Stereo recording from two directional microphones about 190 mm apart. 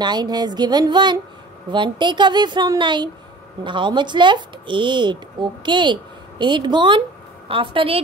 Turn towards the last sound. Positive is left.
turn(degrees=-30)  # may be behind; listen again after turning